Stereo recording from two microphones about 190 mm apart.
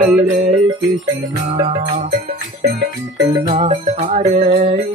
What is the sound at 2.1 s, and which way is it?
Music, 45° right (ahead or behind).